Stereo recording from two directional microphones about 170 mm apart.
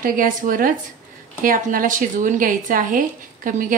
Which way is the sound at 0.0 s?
55° right (ahead or behind).